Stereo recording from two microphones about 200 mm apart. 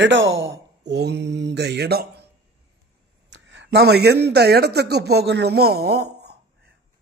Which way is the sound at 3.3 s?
65° right (ahead or behind).